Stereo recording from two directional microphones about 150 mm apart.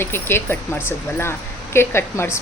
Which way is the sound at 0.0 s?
15° left (ahead or behind).